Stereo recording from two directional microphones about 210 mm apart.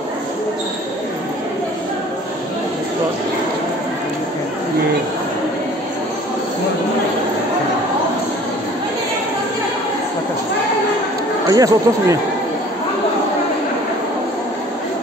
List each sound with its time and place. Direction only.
11.4 s speech: 15° right (ahead or behind)